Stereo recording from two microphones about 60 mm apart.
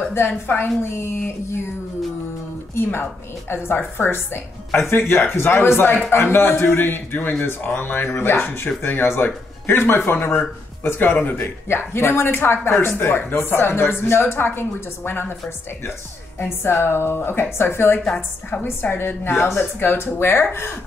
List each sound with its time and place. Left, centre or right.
0.3 s a woman's voice: left
0.9 s a man's voice: left
2.7 s a man's voice: left
11.1 s a woman's voice: left
11.7 s a man's voice: left
16.3 s a man's voice: left